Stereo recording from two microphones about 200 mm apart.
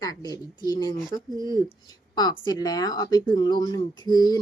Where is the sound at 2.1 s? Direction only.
20° left (ahead or behind).